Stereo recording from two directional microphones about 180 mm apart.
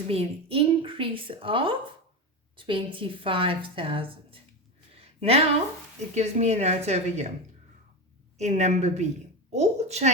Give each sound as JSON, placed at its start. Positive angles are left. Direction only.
{"t": 0.1, "sound": "a woman's voice", "side_deg": -30}
{"t": 4.9, "sound": "a sound", "side_deg": -35}
{"t": 6.1, "sound": "a woman's voice", "side_deg": -35}
{"t": 8.4, "sound": "a woman's voice", "side_deg": -40}